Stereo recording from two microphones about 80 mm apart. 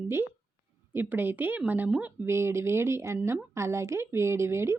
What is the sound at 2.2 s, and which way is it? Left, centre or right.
A woman's voice, right.